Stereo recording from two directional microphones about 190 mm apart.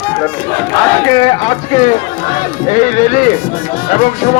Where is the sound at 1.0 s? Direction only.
25° left (ahead or behind).